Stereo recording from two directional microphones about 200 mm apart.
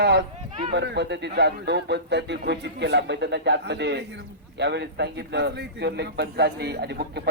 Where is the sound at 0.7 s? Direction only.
60° right (ahead or behind).